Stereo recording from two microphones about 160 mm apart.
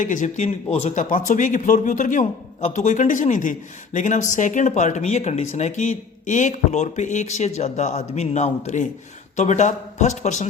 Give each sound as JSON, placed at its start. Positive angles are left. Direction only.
{"t": 0.0, "sound": "speech", "side_deg": 55}